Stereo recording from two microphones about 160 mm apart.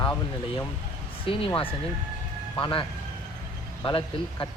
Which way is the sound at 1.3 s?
35° left (ahead or behind).